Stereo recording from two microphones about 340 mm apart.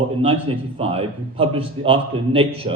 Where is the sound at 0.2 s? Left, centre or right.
Centre.